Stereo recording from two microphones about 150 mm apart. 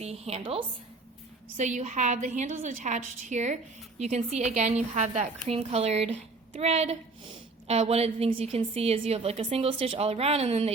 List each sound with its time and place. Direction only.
0.0 s a woman's voice: 45° right (ahead or behind)
1.5 s a woman's voice: 50° right (ahead or behind)